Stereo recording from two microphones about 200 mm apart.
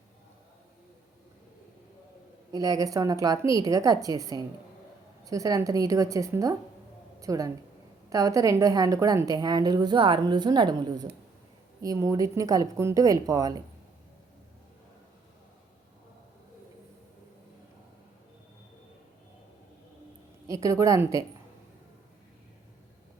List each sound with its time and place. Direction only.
2.5 s a woman's voice: 15° right (ahead or behind)
20.5 s a woman's voice: 15° right (ahead or behind)